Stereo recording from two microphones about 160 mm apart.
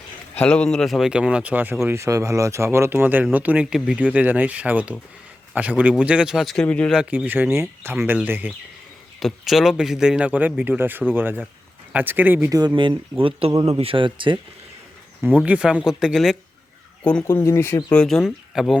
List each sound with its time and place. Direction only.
0.3 s a man's voice: 5° left (ahead or behind)
6.9 s a man's voice: 5° right (ahead or behind)
13.7 s speech: 35° right (ahead or behind)
15.4 s a man's voice: 5° right (ahead or behind)
17.2 s speech: 15° left (ahead or behind)
17.9 s a man's voice: 5° left (ahead or behind)